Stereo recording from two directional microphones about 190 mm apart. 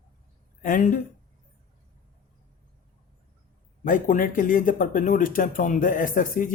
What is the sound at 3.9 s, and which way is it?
Speech, 45° left (ahead or behind).